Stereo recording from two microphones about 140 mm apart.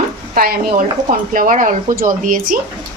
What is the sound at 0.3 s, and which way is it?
Speech, 90° right.